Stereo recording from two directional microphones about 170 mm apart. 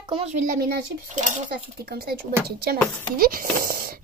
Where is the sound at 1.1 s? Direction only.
45° right (ahead or behind).